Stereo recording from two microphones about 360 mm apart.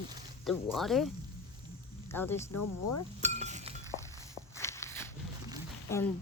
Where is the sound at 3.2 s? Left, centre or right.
Centre.